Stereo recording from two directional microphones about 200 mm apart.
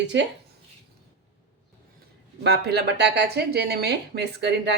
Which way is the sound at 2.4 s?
55° right (ahead or behind).